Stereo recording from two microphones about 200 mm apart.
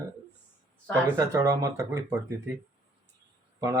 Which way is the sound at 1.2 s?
15° right (ahead or behind).